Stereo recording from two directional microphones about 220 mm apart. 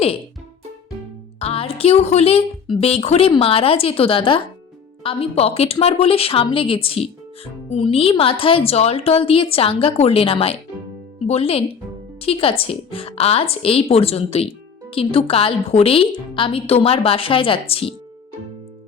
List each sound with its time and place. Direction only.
1.4 s a woman's voice: 25° left (ahead or behind)